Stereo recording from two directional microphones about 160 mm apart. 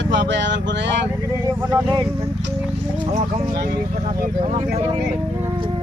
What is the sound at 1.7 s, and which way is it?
Speech, 25° right (ahead or behind).